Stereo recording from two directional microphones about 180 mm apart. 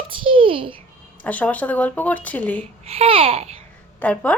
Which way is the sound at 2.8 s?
30° right (ahead or behind).